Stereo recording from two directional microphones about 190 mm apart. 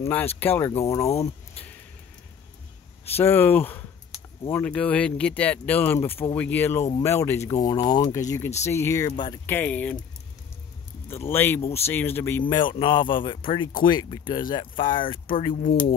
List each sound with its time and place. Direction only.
0.0 s speech: 10° left (ahead or behind)
3.2 s speech: 10° left (ahead or behind)
9.5 s speech: 10° left (ahead or behind)
11.1 s speech: 10° left (ahead or behind); by 15.8 s 30° left (ahead or behind)